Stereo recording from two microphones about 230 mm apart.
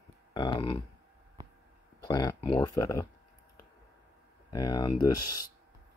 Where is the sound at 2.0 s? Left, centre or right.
Centre.